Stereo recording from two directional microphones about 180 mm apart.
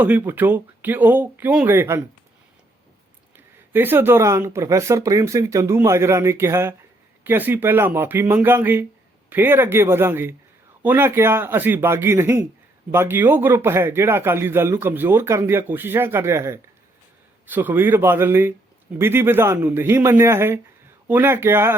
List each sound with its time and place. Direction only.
0.0 s a man's voice: 10° right (ahead or behind)
3.3 s a man's voice: 10° right (ahead or behind)